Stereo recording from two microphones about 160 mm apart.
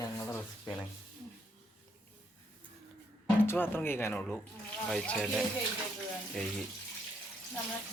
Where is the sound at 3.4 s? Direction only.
15° left (ahead or behind); by 5.4 s centre (ahead or behind).